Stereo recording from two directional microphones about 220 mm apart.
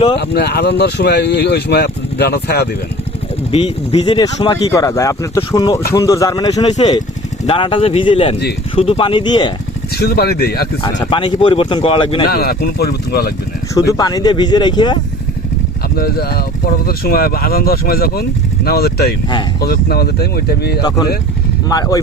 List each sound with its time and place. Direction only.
0.2 s speech: 50° left (ahead or behind)
3.5 s speech: 25° left (ahead or behind)
9.9 s speech: 45° left (ahead or behind)
11.0 s speech: 20° left (ahead or behind)
12.3 s speech: 45° left (ahead or behind)
13.7 s speech: 15° left (ahead or behind)
16.0 s speech: 45° left (ahead or behind)
20.8 s speech: 15° left (ahead or behind)